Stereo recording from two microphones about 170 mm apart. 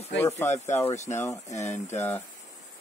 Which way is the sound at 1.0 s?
15° left (ahead or behind).